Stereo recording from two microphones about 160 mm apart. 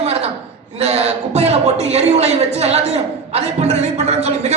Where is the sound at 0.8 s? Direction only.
40° right (ahead or behind).